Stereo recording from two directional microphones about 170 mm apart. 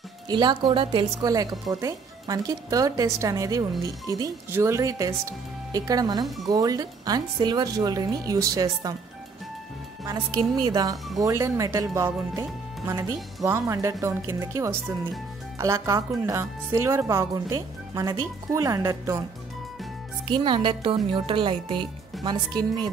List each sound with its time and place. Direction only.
0.3 s a woman's voice: 25° right (ahead or behind)
6.2 s speech: centre (ahead or behind)
6.5 s a woman's voice: 20° right (ahead or behind)
10.0 s a woman's voice: 25° right (ahead or behind)
20.2 s a woman's voice: 30° right (ahead or behind)